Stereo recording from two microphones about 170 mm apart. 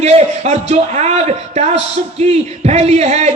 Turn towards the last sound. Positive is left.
turn(degrees=-40)  # may be behind; listen again after turning